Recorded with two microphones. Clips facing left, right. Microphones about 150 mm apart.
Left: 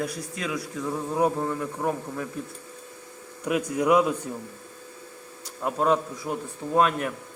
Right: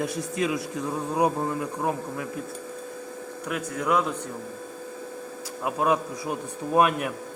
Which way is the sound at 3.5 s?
15° left (ahead or behind).